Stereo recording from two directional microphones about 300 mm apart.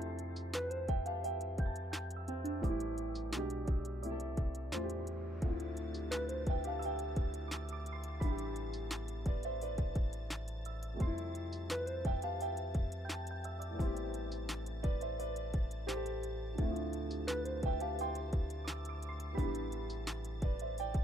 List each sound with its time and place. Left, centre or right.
0.0 s music: centre
11.7 s music: centre